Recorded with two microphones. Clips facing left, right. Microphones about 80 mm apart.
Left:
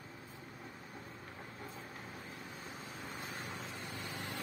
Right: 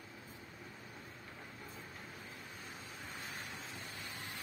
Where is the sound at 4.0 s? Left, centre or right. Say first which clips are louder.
Left 4 dB; left.